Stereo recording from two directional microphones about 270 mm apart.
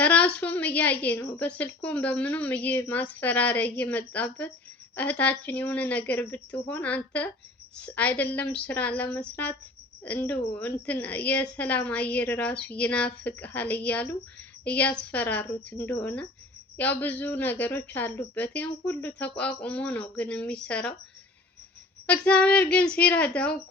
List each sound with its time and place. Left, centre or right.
0.0 s a woman's voice: centre
22.0 s a woman's voice: centre